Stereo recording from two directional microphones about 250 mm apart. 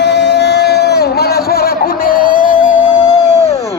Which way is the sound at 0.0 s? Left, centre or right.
Left.